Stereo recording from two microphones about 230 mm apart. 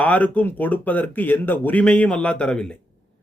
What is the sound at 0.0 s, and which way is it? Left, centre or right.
Speech, centre.